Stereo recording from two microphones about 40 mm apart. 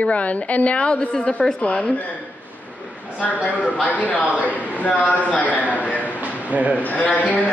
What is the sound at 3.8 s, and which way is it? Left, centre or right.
A man's voice, left.